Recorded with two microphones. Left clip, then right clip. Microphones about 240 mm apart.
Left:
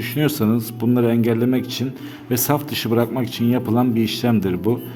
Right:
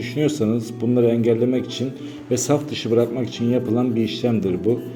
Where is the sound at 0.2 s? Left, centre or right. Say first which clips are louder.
Even; left.